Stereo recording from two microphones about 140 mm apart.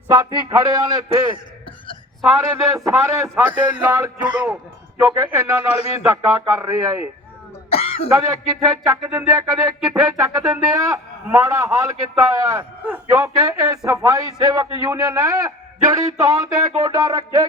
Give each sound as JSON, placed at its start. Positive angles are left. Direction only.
{"t": 0.1, "sound": "a man's voice", "side_deg": -30}
{"t": 2.7, "sound": "a man's voice", "side_deg": -20}
{"t": 7.7, "sound": "throat clearing", "side_deg": 45}
{"t": 8.1, "sound": "a man's voice", "side_deg": -25}